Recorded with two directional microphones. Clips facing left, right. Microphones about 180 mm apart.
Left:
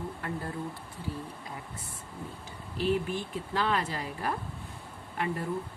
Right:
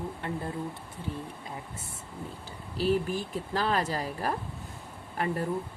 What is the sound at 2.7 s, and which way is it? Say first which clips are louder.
Speech: right 2 dB; 40° right (ahead or behind).